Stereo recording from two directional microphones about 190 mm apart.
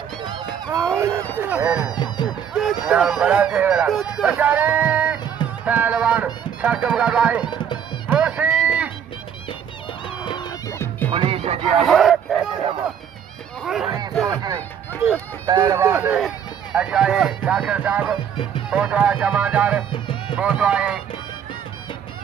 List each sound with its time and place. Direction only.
0.6 s a sound: 15° right (ahead or behind)
1.4 s speech: 10° right (ahead or behind)
1.8 s speech: 20° left (ahead or behind)
2.5 s speech: centre (ahead or behind)
7.4 s music: 25° left (ahead or behind)
8.0 s music: 5° right (ahead or behind)
10.1 s music: 25° left (ahead or behind)
11.1 s speech: 30° right (ahead or behind)
11.8 s speech: centre (ahead or behind)
13.6 s speech: centre (ahead or behind)
14.3 s speech: 20° right (ahead or behind)
19.9 s music: 25° left (ahead or behind)
20.4 s speech: 5° right (ahead or behind)